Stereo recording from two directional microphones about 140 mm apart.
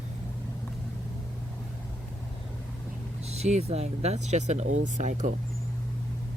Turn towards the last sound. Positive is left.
turn(degrees=-65)  # may be behind; listen again after turning